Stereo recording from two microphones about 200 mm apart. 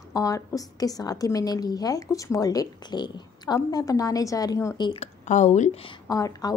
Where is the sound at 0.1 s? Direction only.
15° left (ahead or behind).